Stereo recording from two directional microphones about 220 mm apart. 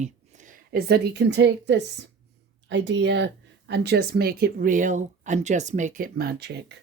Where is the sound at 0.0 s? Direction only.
35° right (ahead or behind).